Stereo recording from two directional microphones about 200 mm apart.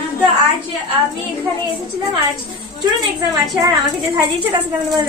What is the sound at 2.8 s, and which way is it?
Speech, 15° right (ahead or behind).